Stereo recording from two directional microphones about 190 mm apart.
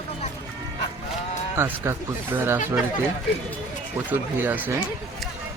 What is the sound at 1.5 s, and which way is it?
Speech, 10° right (ahead or behind).